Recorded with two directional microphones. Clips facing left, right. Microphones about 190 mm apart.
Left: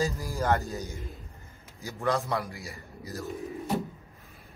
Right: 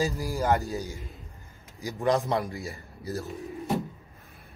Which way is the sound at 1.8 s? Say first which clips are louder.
Right 3 dB; 15° right (ahead or behind).